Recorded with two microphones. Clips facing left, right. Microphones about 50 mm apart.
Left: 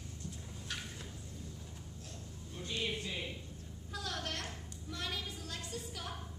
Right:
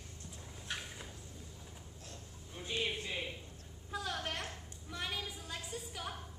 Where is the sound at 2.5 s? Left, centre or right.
Centre.